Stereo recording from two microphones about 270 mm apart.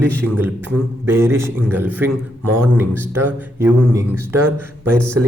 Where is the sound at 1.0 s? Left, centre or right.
Centre.